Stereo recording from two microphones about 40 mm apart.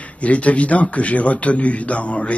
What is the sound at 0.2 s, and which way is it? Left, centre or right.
A man's voice, left.